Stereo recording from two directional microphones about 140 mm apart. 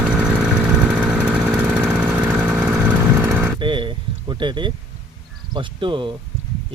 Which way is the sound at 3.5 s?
35° right (ahead or behind).